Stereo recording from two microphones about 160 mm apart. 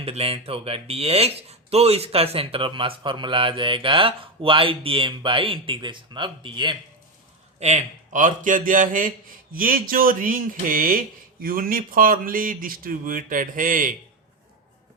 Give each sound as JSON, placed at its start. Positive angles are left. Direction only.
{"t": 0.0, "sound": "speech", "side_deg": -40}
{"t": 7.6, "sound": "a man's voice", "side_deg": -50}